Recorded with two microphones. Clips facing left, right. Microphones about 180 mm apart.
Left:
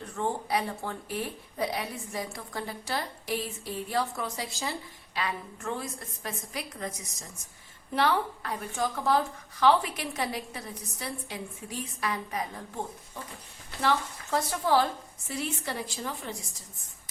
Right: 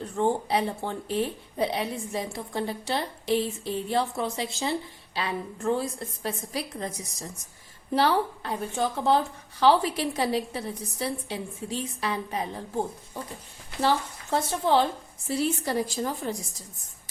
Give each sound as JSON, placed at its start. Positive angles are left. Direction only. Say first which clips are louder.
{"t": 0.2, "sound": "a woman's voice", "louder": "right 5 dB", "side_deg": -30}
{"t": 15.3, "sound": "a woman's voice", "louder": "right 7 dB", "side_deg": -35}